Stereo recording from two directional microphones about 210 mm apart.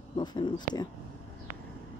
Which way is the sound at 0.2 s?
20° left (ahead or behind).